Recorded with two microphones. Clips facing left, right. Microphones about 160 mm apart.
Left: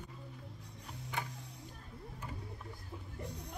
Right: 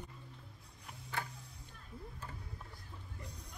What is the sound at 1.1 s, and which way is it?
Music, 15° left (ahead or behind).